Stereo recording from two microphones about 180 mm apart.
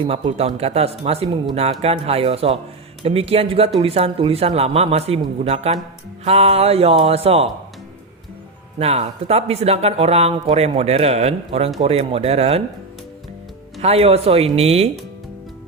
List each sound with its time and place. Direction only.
0.0 s speech: 30° right (ahead or behind)
8.8 s speech: 35° right (ahead or behind)
13.8 s speech: 35° right (ahead or behind)